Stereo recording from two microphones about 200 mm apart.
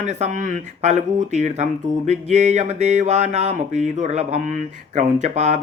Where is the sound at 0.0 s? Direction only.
35° right (ahead or behind).